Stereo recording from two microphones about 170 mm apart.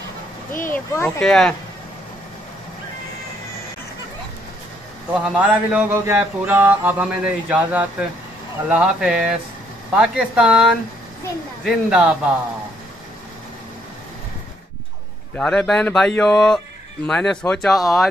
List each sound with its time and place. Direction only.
0.5 s a child's voice: 55° left (ahead or behind)
0.7 s speech: 10° left (ahead or behind)
5.3 s speech: 10° right (ahead or behind)
15.3 s speech: 5° left (ahead or behind)